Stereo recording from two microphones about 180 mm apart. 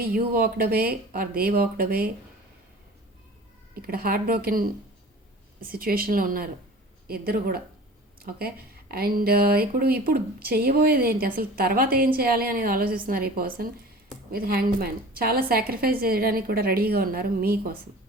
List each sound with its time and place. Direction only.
0.0 s speech: 55° right (ahead or behind)
3.8 s speech: 55° right (ahead or behind)